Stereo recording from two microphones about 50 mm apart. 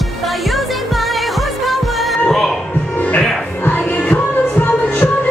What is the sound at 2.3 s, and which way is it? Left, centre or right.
Speech, centre.